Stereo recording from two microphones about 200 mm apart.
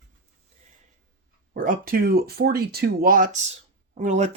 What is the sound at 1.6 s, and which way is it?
Speech, 45° right (ahead or behind).